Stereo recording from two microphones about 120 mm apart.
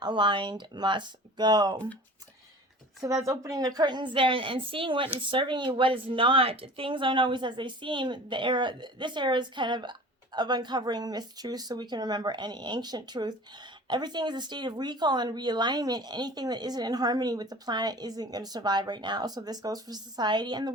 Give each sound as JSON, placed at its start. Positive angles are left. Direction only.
{"t": 0.0, "sound": "a woman's voice", "side_deg": -40}
{"t": 3.2, "sound": "a woman's voice", "side_deg": -25}